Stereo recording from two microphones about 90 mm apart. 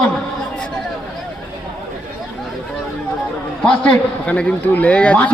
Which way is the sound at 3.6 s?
10° left (ahead or behind).